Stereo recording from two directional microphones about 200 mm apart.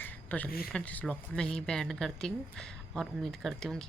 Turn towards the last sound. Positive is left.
turn(degrees=0)  # may be behind; listen again after turning